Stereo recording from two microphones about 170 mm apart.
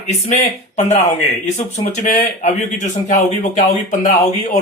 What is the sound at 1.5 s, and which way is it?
Speech, 45° left (ahead or behind).